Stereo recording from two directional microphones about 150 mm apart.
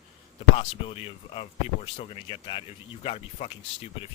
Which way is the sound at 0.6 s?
40° left (ahead or behind).